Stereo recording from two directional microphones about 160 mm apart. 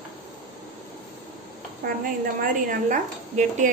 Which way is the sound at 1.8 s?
70° right (ahead or behind).